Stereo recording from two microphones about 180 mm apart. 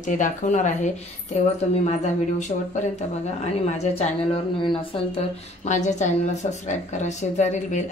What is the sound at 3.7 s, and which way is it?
A woman's voice, 30° left (ahead or behind).